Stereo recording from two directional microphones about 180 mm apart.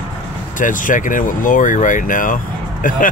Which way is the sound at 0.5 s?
45° left (ahead or behind).